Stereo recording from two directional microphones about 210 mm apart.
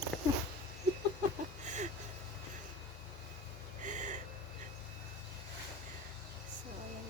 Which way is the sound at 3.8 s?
35° right (ahead or behind).